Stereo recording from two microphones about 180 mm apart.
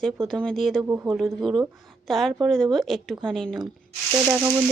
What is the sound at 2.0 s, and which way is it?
A woman's voice, centre (ahead or behind).